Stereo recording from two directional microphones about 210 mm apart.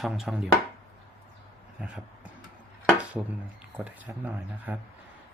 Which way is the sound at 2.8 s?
5° right (ahead or behind).